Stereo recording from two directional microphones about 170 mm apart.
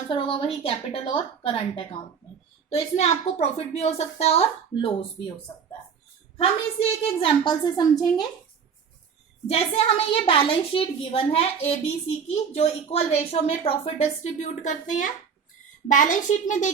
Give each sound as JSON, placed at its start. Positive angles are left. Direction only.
{"t": 0.1, "sound": "a woman's voice", "side_deg": 30}
{"t": 6.3, "sound": "a woman's voice", "side_deg": 35}
{"t": 9.5, "sound": "a woman's voice", "side_deg": 35}